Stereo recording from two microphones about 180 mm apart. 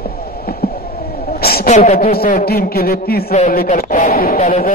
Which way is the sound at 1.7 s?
35° left (ahead or behind).